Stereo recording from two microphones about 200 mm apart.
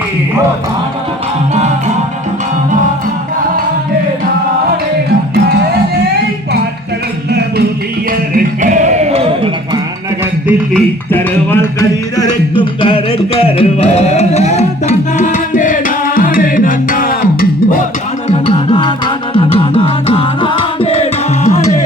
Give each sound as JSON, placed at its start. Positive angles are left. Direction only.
{"t": 7.3, "sound": "music", "side_deg": -55}
{"t": 8.3, "sound": "music", "side_deg": -45}
{"t": 10.8, "sound": "music", "side_deg": 10}
{"t": 18.3, "sound": "music", "side_deg": 30}